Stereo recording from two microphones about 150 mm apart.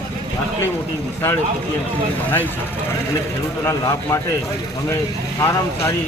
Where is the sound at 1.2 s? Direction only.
15° left (ahead or behind).